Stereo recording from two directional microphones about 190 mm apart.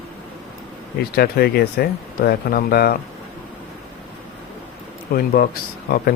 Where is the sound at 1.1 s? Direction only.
55° left (ahead or behind).